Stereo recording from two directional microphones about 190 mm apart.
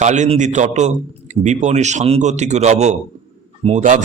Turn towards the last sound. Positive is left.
turn(degrees=-40)  # may be behind; listen again after turning